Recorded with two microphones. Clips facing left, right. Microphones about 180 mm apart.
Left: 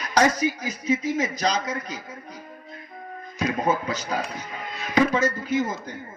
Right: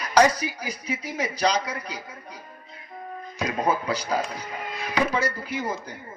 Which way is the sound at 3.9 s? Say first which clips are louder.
Right 2 dB; 35° right (ahead or behind).